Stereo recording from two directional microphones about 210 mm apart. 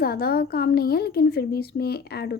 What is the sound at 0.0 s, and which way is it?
A woman's voice, 45° left (ahead or behind).